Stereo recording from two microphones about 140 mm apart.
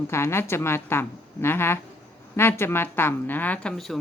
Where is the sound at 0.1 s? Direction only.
20° left (ahead or behind).